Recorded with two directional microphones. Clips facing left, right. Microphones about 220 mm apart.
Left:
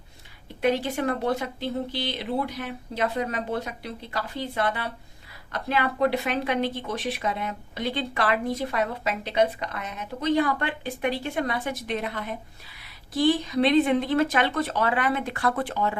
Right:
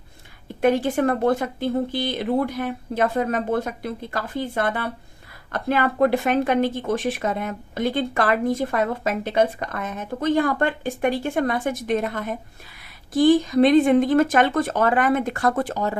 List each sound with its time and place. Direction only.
0.6 s speech: 50° right (ahead or behind)